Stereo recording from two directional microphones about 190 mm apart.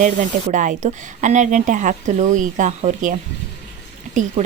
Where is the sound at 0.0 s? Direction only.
40° right (ahead or behind).